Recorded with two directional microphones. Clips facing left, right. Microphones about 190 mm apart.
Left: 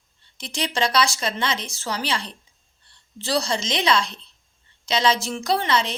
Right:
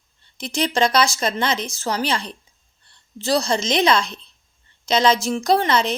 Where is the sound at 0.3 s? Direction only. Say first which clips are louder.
Right 5 dB; 45° right (ahead or behind).